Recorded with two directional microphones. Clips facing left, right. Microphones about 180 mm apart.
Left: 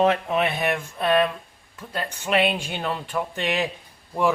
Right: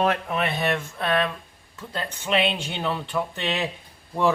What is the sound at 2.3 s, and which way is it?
Speech, 10° left (ahead or behind).